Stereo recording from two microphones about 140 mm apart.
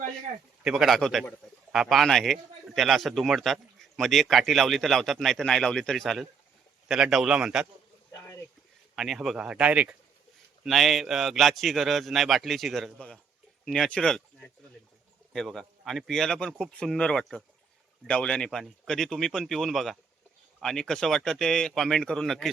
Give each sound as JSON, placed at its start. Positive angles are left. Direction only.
{"t": 0.6, "sound": "a man's voice", "side_deg": -5}
{"t": 8.1, "sound": "a sound", "side_deg": 20}
{"t": 9.0, "sound": "a man's voice", "side_deg": 0}